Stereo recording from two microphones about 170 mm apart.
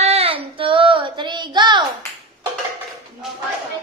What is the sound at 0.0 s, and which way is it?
Child singing, 35° right (ahead or behind).